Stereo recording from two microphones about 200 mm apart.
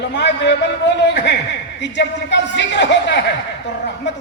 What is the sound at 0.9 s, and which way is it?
A man's voice, 60° left (ahead or behind).